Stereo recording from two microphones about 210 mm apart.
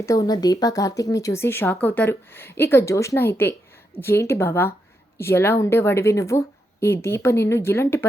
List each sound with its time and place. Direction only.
0.0 s speech: 15° left (ahead or behind)